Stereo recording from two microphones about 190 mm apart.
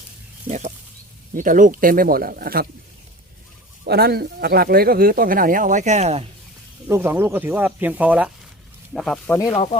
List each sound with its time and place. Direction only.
0.4 s speech: 35° right (ahead or behind); by 2.6 s 50° right (ahead or behind)
3.8 s speech: 55° right (ahead or behind); by 6.2 s 35° right (ahead or behind)
6.8 s speech: 15° right (ahead or behind); by 9.5 s 10° left (ahead or behind)